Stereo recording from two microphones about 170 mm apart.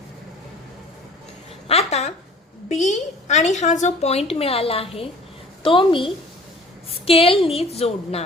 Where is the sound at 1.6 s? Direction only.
40° left (ahead or behind).